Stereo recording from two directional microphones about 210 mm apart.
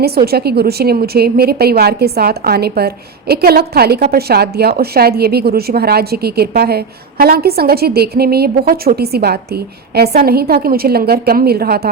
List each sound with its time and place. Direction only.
0.0 s a woman's voice: 50° right (ahead or behind)